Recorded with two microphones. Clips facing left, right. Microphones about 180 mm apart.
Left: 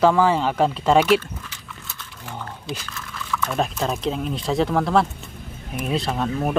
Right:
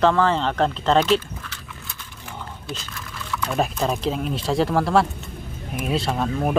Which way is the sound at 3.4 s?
Centre (ahead or behind).